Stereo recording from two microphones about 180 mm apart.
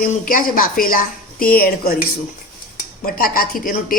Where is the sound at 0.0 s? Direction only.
50° left (ahead or behind).